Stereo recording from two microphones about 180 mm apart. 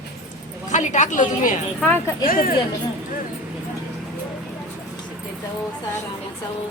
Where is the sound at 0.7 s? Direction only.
40° left (ahead or behind).